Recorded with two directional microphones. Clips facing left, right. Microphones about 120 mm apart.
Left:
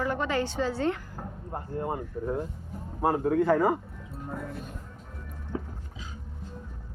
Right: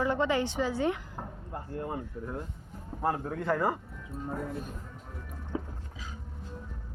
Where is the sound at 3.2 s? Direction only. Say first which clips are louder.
Left 7 dB; 5° left (ahead or behind).